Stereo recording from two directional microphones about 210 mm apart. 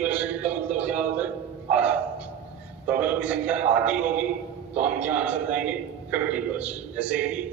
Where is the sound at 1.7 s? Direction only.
5° right (ahead or behind).